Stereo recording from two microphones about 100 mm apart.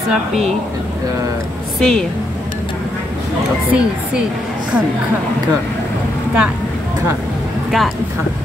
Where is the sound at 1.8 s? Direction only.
5° left (ahead or behind).